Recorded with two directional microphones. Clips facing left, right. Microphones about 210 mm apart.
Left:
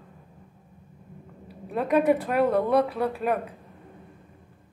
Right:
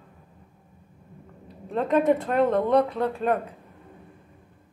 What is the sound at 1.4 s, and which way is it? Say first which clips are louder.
Speech: right 1 dB; 10° left (ahead or behind).